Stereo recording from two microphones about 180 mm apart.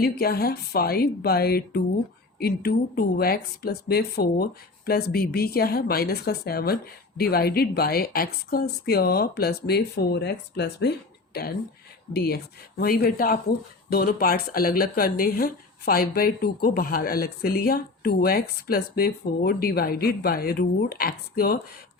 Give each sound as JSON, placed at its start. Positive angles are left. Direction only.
{"t": 0.0, "sound": "speech", "side_deg": 60}
{"t": 12.1, "sound": "speech", "side_deg": 60}